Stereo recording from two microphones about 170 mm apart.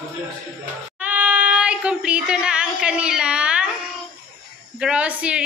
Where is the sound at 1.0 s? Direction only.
10° right (ahead or behind).